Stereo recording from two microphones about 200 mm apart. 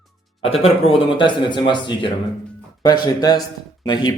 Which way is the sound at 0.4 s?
30° left (ahead or behind).